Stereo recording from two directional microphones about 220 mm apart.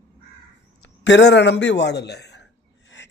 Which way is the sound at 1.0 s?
55° left (ahead or behind).